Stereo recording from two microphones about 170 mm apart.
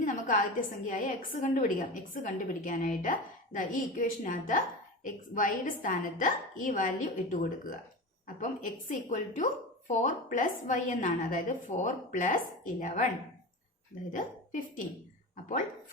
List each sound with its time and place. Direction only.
0.0 s a woman's voice: 55° left (ahead or behind)
14.1 s a woman's voice: 50° left (ahead or behind)